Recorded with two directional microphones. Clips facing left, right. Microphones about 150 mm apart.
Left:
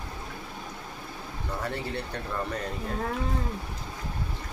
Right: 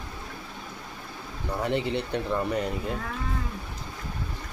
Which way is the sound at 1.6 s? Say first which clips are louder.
Right 7 dB; 20° right (ahead or behind).